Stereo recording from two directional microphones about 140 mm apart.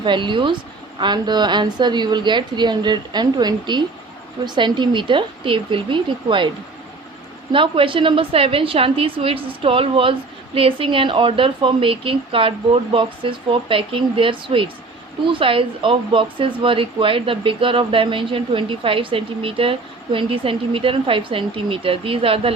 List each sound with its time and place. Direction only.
0.0 s speech: 35° right (ahead or behind)
7.5 s speech: 40° right (ahead or behind)